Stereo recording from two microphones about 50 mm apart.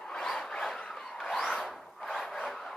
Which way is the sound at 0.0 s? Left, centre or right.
Centre.